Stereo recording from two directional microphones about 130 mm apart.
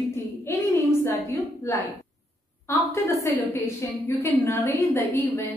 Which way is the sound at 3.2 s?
20° left (ahead or behind).